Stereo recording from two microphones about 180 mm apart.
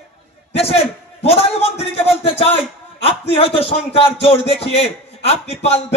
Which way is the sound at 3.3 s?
30° left (ahead or behind).